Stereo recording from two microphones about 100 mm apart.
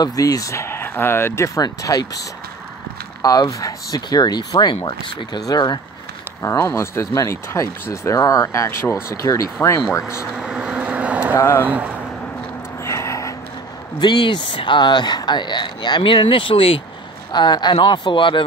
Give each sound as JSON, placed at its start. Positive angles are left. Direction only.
{"t": 0.0, "sound": "speech", "side_deg": 40}
{"t": 6.6, "sound": "speech", "side_deg": 25}
{"t": 10.3, "sound": "vehicle", "side_deg": -5}
{"t": 11.3, "sound": "speech", "side_deg": 25}
{"t": 11.6, "sound": "speech", "side_deg": -15}
{"t": 12.8, "sound": "gasp", "side_deg": 30}
{"t": 13.9, "sound": "speech", "side_deg": 50}
{"t": 17.3, "sound": "speech", "side_deg": 50}